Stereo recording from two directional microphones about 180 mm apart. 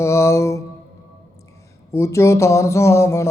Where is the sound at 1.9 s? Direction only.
15° left (ahead or behind).